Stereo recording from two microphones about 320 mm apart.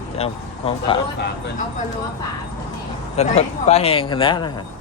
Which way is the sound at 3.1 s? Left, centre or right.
Centre.